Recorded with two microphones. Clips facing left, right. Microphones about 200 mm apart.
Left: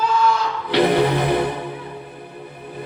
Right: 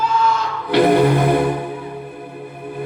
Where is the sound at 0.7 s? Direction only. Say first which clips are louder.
Right 4 dB; 50° right (ahead or behind).